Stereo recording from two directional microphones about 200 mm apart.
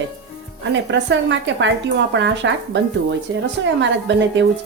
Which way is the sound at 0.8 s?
65° right (ahead or behind).